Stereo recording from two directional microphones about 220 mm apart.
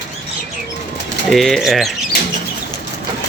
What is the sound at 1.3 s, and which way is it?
Speech, centre (ahead or behind).